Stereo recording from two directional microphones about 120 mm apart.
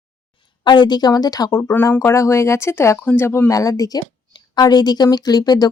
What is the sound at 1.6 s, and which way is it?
Speech, 20° left (ahead or behind).